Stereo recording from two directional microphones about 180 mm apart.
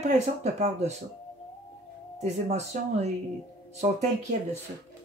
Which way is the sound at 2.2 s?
40° right (ahead or behind).